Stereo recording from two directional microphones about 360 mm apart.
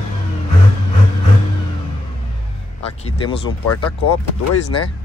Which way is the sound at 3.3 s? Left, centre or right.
Centre.